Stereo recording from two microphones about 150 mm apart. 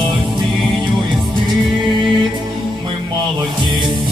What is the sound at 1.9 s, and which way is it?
Music, 30° right (ahead or behind).